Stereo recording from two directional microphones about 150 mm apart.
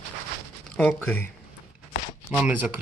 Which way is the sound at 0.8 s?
10° left (ahead or behind).